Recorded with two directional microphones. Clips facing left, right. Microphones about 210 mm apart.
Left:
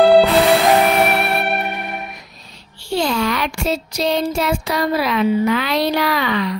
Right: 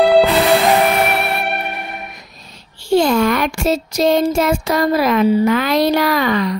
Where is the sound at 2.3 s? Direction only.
45° right (ahead or behind).